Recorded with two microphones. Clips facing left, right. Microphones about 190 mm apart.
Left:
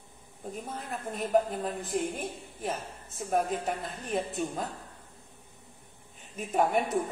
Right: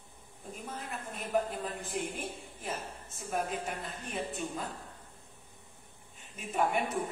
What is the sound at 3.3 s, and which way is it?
A woman's voice, 45° left (ahead or behind).